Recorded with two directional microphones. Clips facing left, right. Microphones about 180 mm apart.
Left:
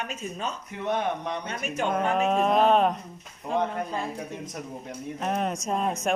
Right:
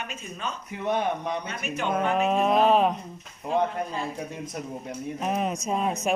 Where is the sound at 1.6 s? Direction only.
45° left (ahead or behind).